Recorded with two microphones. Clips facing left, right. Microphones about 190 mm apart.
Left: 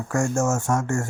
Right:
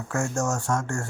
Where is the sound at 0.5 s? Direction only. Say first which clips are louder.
Left 4 dB; 15° left (ahead or behind).